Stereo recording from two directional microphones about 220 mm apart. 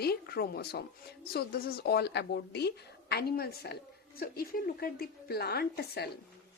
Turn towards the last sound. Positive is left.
turn(degrees=45)  # may be behind; listen again after turning